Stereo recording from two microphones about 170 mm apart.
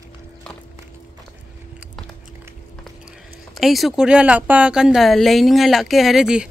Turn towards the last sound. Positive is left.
turn(degrees=-5)  # may be behind; listen again after turning